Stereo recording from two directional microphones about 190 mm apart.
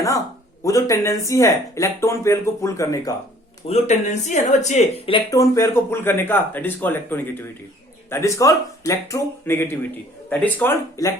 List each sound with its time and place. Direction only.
0.6 s speech: 15° left (ahead or behind)
3.7 s speech: 35° left (ahead or behind); by 11.1 s 15° left (ahead or behind)